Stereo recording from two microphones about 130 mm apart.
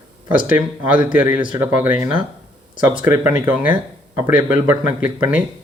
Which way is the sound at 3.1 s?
15° right (ahead or behind).